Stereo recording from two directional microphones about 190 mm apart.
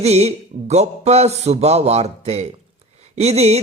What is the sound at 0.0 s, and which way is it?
Speech, 35° right (ahead or behind).